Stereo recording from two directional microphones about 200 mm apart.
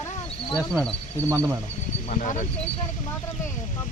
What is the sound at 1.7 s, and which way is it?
Speech, 35° left (ahead or behind).